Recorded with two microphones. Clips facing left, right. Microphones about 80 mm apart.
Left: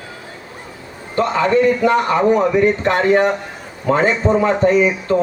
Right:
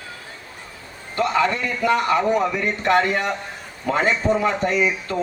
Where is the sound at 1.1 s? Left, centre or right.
Left.